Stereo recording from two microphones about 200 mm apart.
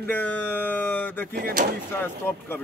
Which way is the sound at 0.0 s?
10° left (ahead or behind).